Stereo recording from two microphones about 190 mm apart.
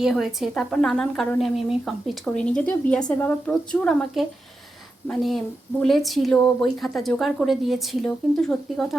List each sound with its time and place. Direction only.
0.0 s a woman's voice: centre (ahead or behind)
5.8 s a woman's voice: centre (ahead or behind)